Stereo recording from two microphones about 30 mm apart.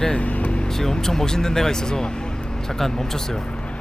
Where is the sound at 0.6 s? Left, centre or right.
Centre.